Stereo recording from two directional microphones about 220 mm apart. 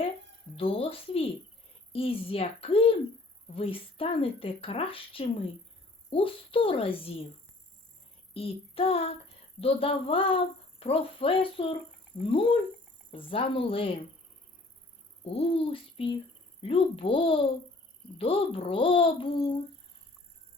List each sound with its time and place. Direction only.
0.5 s a woman's voice: 25° left (ahead or behind)
8.3 s child singing: 25° left (ahead or behind)
9.6 s a woman's voice: 25° left (ahead or behind)
15.2 s a woman's voice: 25° left (ahead or behind)